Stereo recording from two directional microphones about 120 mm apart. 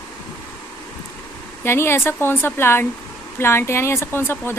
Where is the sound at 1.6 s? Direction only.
20° left (ahead or behind).